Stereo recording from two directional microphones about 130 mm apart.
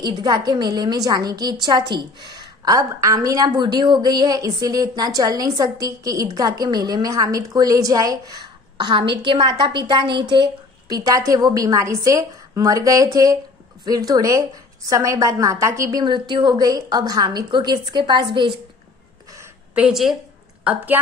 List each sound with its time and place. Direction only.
0.0 s a woman's voice: 35° right (ahead or behind)
19.7 s a woman's voice: 5° right (ahead or behind)